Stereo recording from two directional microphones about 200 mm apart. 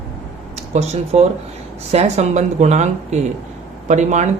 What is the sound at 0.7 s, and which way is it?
Speech, 30° right (ahead or behind).